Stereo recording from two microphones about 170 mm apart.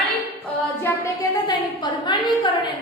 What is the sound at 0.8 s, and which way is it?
A woman's voice, 20° left (ahead or behind).